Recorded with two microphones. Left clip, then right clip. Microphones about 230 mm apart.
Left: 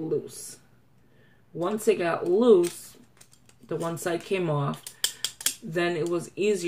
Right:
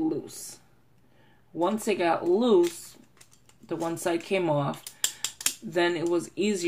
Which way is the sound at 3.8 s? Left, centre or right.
Right.